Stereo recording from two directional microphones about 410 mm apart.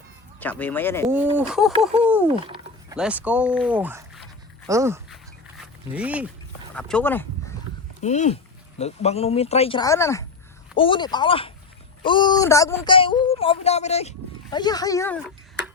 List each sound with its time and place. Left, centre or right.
0.3 s speech: centre
2.0 s a sound: centre
3.0 s speech: centre
8.0 s speech: centre